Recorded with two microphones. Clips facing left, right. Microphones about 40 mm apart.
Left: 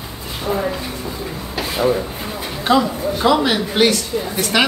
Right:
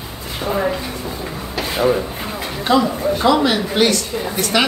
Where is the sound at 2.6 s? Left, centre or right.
Centre.